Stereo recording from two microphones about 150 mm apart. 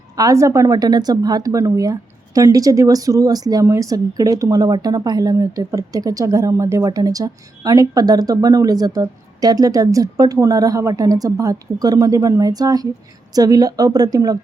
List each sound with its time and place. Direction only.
0.2 s speech: 20° right (ahead or behind)